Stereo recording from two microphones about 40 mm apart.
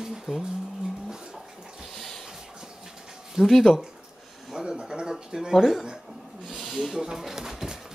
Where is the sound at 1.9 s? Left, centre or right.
Centre.